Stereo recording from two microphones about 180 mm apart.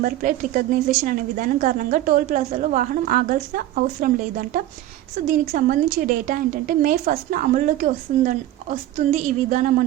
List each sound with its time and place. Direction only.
0.0 s a woman's voice: 50° right (ahead or behind)